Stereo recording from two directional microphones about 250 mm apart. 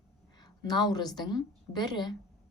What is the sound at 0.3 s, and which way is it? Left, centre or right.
A woman's voice, centre.